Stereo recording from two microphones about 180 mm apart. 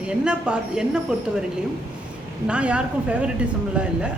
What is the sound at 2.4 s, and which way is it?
A woman's voice, 5° right (ahead or behind).